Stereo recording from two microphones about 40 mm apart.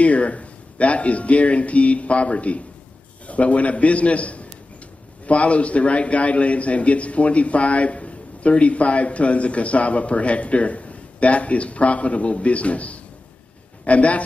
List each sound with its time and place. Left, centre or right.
0.0 s a man's voice: left